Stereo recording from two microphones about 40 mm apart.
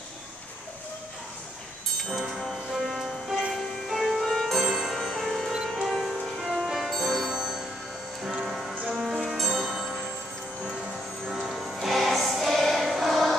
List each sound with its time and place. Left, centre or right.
2.0 s music: centre
4.6 s music: centre
4.9 s music: centre
6.4 s music: centre
7.3 s music: centre
9.2 s music: centre
11.3 s music: centre